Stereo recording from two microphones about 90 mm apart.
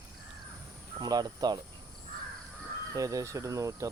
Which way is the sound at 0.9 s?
50° right (ahead or behind).